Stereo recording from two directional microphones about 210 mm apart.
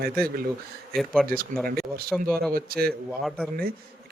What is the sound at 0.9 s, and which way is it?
Speech, 5° left (ahead or behind).